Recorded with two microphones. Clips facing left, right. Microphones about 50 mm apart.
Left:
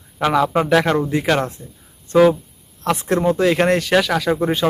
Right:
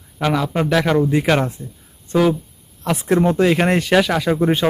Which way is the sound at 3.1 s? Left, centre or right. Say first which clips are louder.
Right 2 dB; right.